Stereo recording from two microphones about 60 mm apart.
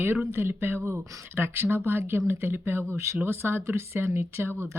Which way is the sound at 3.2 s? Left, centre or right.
Right.